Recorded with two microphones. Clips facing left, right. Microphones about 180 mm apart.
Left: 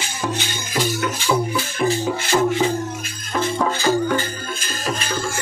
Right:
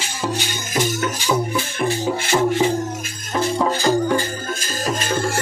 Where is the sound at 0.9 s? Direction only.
45° right (ahead or behind).